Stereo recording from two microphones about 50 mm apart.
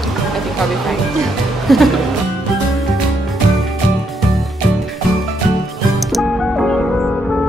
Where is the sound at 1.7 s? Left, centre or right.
Centre.